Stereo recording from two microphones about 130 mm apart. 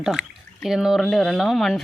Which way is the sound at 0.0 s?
5° right (ahead or behind).